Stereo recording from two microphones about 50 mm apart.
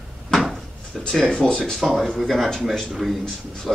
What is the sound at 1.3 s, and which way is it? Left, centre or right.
Speech, centre.